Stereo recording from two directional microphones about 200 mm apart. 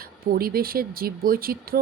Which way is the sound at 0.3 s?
50° right (ahead or behind).